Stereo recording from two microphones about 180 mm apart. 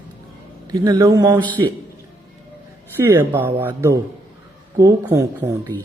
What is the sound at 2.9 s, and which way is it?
A man's voice, 15° right (ahead or behind).